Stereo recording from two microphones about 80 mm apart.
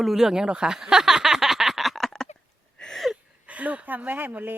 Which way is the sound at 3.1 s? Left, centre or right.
Centre.